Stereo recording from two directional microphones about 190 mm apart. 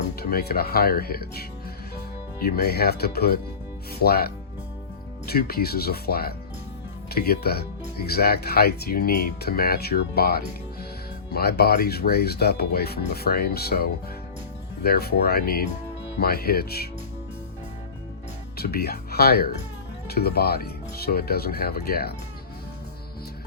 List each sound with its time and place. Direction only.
0.2 s speech: 55° left (ahead or behind)
2.4 s speech: 55° left (ahead or behind)
18.5 s speech: 55° left (ahead or behind)